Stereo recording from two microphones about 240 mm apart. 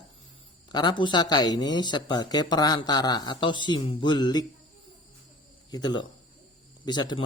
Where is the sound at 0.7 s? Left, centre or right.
Centre.